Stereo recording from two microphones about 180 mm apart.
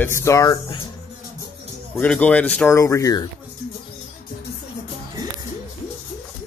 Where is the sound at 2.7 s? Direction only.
15° left (ahead or behind).